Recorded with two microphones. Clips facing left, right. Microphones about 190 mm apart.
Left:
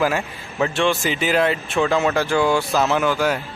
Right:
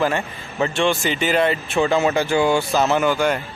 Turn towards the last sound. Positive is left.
turn(degrees=5)  # may be behind; listen again after turning